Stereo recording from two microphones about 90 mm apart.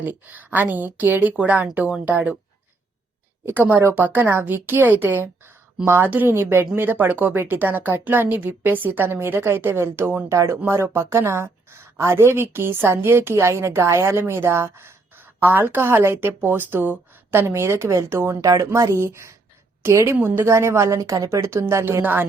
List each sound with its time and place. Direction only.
0.0 s a woman's voice: 20° right (ahead or behind)
3.4 s a woman's voice: 20° right (ahead or behind)
22.0 s a woman's voice: 20° right (ahead or behind)